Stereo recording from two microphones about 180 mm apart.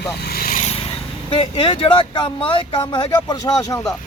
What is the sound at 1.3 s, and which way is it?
Speech, 30° left (ahead or behind).